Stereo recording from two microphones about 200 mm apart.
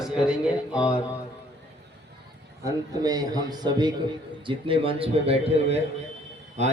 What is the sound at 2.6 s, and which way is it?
A man's voice, 20° right (ahead or behind).